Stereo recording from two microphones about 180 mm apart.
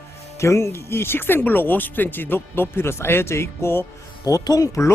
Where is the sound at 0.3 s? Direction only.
15° left (ahead or behind).